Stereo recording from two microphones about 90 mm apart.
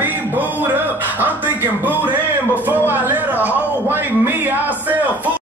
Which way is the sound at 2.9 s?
20° right (ahead or behind).